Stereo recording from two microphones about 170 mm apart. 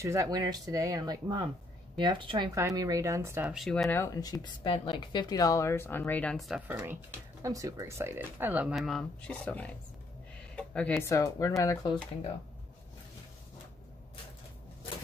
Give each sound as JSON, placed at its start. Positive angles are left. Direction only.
{"t": 0.0, "sound": "speech", "side_deg": -20}
{"t": 3.5, "sound": "speech", "side_deg": 0}
{"t": 3.9, "sound": "speech", "side_deg": 20}
{"t": 6.7, "sound": "speech", "side_deg": -10}
{"t": 10.5, "sound": "a sound", "side_deg": 5}
{"t": 11.1, "sound": "speech", "side_deg": 20}